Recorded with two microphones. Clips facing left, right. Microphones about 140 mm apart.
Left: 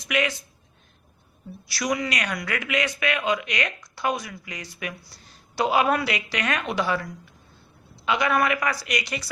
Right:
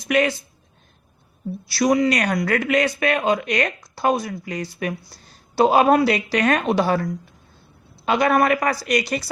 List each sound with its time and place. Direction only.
0.1 s speech: 40° right (ahead or behind)
1.6 s speech: 30° right (ahead or behind)